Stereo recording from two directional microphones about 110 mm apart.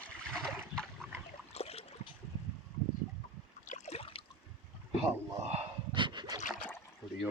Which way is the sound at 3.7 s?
80° left.